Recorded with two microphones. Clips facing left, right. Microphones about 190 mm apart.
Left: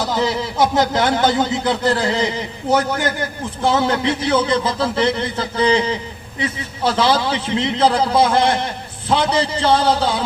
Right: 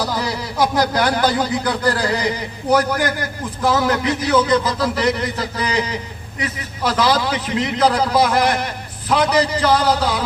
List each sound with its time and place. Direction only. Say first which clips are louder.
0.0 s speech: left 3 dB; 25° left (ahead or behind)